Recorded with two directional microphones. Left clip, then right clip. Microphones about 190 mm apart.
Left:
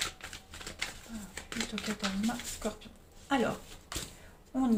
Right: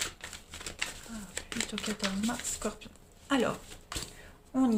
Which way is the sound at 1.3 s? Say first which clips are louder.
Right 2 dB; 30° right (ahead or behind).